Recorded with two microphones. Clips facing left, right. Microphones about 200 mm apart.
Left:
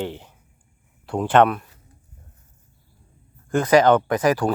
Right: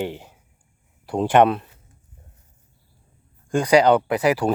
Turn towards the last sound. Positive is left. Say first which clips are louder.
# even
turn(degrees=-10)  # may be behind; listen again after turning